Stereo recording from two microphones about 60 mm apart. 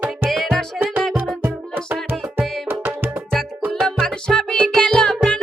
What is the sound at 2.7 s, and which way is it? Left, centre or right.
Music, right.